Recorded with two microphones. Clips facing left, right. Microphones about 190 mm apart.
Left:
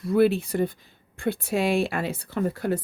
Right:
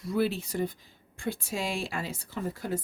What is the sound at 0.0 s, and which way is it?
Speech, 60° left (ahead or behind).